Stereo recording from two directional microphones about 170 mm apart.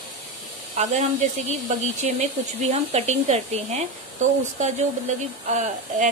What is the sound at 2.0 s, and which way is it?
Speech, 40° right (ahead or behind).